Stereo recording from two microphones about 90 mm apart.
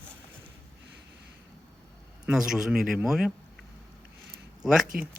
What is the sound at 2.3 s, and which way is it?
A man's voice, 5° right (ahead or behind).